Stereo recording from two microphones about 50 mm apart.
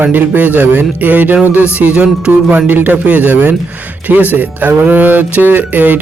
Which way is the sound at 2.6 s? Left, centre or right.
Right.